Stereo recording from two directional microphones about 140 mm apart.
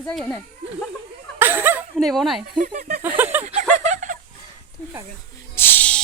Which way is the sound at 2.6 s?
75° right (ahead or behind).